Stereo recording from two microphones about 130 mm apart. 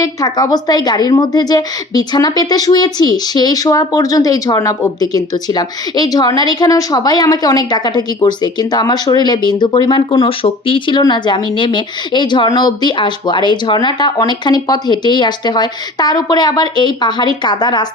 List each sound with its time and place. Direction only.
0.0 s a woman's voice: 30° left (ahead or behind)